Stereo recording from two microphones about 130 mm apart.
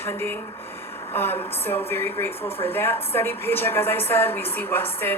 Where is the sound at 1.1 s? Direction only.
15° left (ahead or behind).